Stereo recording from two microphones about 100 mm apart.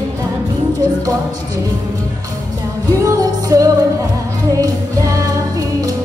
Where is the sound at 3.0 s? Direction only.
35° right (ahead or behind).